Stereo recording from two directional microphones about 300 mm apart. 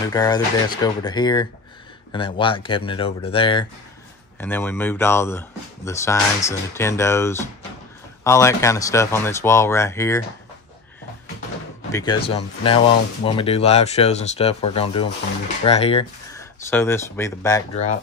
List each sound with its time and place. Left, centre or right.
0.0 s speech: centre
11.9 s speech: centre